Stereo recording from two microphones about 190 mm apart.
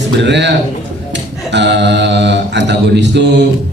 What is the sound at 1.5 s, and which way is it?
Mantra, 65° right (ahead or behind).